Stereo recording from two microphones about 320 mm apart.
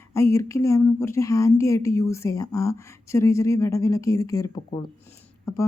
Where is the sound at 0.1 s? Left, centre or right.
Centre.